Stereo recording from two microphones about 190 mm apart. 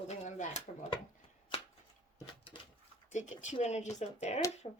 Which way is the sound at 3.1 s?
40° left (ahead or behind).